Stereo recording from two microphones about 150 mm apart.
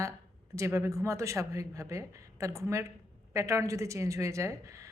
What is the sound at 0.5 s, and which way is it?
A man's voice, 20° right (ahead or behind).